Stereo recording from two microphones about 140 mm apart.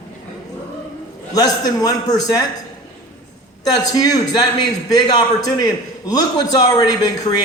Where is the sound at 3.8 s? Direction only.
25° left (ahead or behind).